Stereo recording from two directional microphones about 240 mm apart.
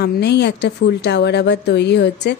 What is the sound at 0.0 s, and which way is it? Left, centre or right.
A woman's voice, left.